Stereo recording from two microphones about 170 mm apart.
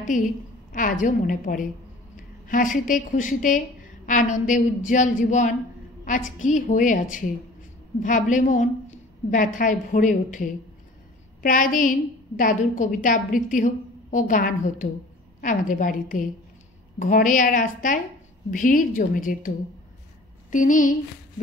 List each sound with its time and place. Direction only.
0.1 s a woman's voice: 50° left (ahead or behind)
20.5 s a woman's voice: 50° left (ahead or behind)